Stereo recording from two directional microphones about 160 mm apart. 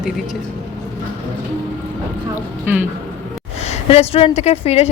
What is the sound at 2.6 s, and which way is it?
Speech, 10° right (ahead or behind).